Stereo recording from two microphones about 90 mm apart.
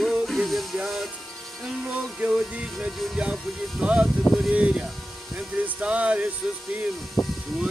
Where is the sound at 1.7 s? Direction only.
15° right (ahead or behind).